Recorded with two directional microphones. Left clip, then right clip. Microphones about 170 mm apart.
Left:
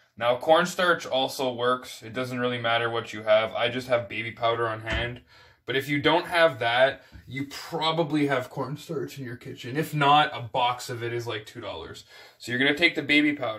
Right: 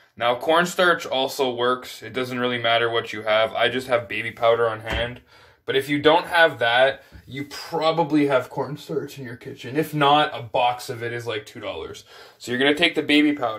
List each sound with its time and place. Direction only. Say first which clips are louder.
0.2 s speech: right 2 dB; 20° right (ahead or behind)